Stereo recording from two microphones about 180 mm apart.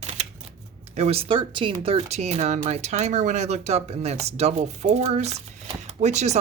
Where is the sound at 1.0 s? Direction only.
35° right (ahead or behind).